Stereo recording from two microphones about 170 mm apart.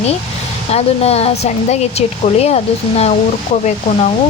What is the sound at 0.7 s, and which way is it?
Speech, 35° left (ahead or behind).